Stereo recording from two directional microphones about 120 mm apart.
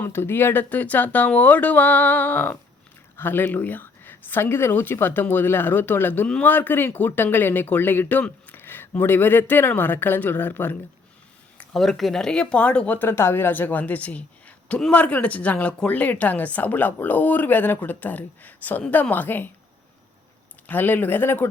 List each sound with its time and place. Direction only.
0.0 s speech: 20° left (ahead or behind)
11.6 s speech: centre (ahead or behind)
20.7 s speech: 15° left (ahead or behind)